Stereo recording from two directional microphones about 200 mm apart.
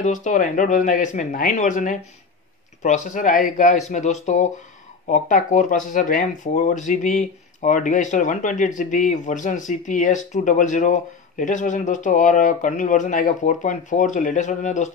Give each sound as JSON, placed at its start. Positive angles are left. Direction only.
{"t": 0.0, "sound": "speech", "side_deg": 40}